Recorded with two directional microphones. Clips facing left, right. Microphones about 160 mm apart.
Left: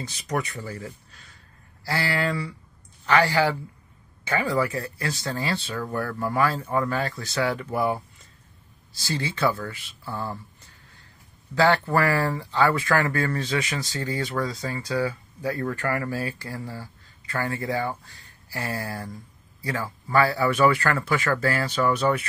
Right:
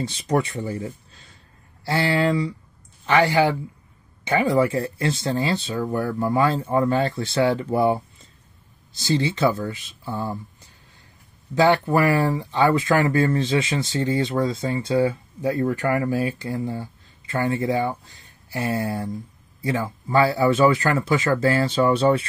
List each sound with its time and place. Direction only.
0.0 s speech: 25° right (ahead or behind)